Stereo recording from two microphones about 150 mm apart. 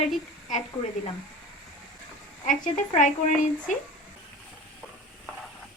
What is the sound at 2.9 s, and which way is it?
Speech, 60° left (ahead or behind).